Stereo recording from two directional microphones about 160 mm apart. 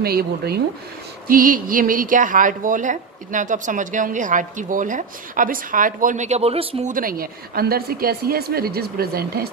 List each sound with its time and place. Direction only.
0.0 s a woman's voice: 75° right (ahead or behind)
1.4 s a woman's voice: 60° right (ahead or behind); by 6.9 s 35° right (ahead or behind)
6.9 s a woman's voice: 60° right (ahead or behind)